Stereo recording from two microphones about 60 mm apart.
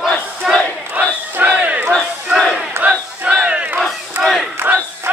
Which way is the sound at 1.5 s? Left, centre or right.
Right.